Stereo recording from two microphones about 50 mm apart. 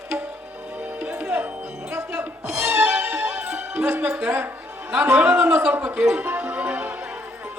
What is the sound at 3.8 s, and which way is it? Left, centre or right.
Speech, right.